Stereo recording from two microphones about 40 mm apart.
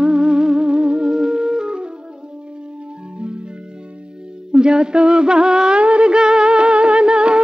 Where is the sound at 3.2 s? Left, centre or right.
Right.